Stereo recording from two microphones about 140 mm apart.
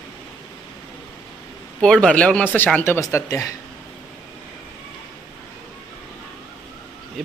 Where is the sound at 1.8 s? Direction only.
5° left (ahead or behind); by 3.5 s 25° left (ahead or behind).